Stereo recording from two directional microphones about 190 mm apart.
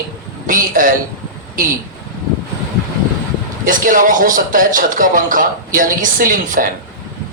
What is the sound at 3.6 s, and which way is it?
A man's voice, 45° right (ahead or behind).